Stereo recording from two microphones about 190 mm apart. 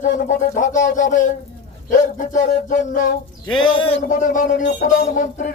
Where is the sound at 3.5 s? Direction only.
25° left (ahead or behind).